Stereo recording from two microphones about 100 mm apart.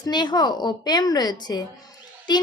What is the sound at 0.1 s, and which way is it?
Speech, 45° left (ahead or behind).